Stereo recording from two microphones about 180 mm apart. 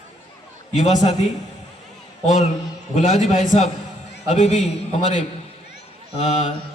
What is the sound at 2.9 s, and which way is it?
Speech, 45° left (ahead or behind).